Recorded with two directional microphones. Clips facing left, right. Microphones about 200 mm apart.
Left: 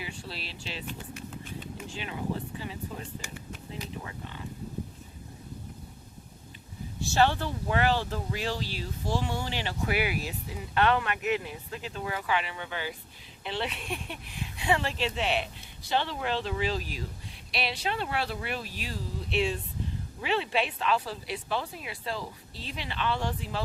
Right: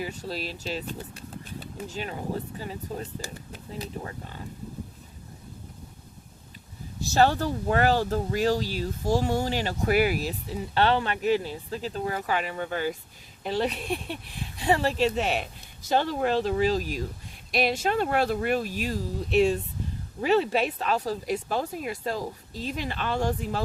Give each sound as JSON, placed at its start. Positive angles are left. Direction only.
{"t": 0.0, "sound": "speech", "side_deg": -40}
{"t": 7.0, "sound": "speech", "side_deg": -40}